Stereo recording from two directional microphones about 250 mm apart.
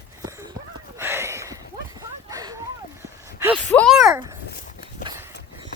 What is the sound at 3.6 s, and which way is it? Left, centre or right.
Speech, centre.